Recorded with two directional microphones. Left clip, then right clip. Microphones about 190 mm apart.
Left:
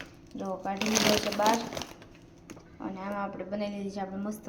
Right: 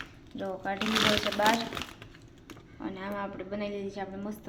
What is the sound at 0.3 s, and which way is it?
Speech, 5° left (ahead or behind).